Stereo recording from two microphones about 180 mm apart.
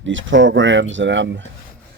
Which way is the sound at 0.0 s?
90° right.